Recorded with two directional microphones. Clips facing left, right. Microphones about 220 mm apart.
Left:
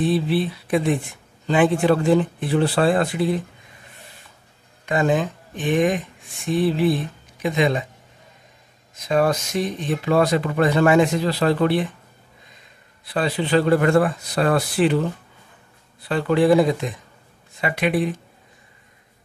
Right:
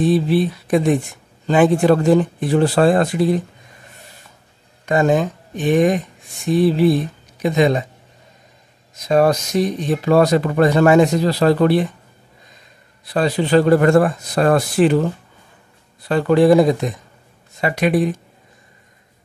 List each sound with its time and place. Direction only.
0.0 s speech: 45° right (ahead or behind)
4.8 s speech: 40° right (ahead or behind)
9.0 s speech: 40° right (ahead or behind)
13.0 s speech: 40° right (ahead or behind)
16.1 s speech: 45° right (ahead or behind)